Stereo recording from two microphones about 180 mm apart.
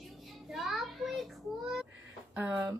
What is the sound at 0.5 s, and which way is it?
Child singing, centre (ahead or behind).